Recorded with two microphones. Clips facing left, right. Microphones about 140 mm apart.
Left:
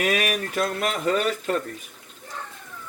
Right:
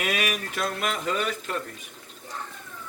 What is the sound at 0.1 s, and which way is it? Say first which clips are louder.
Speech: left 4 dB; 45° left (ahead or behind).